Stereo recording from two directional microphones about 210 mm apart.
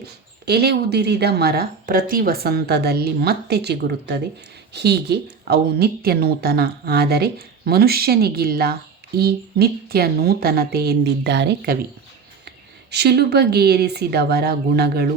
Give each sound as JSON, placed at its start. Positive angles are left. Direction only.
{"t": 0.4, "sound": "speech", "side_deg": -50}
{"t": 12.9, "sound": "speech", "side_deg": -50}